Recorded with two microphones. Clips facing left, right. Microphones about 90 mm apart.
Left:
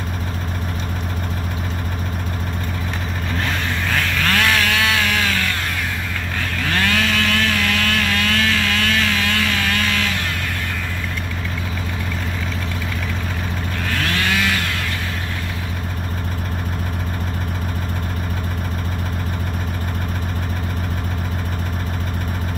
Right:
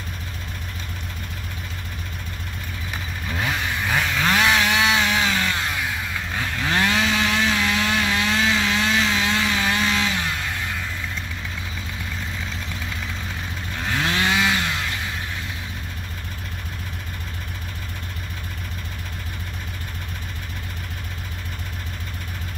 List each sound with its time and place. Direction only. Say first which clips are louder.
3.3 s chainsaw: left 1 dB; 15° right (ahead or behind)
13.8 s chainsaw: even; 20° right (ahead or behind)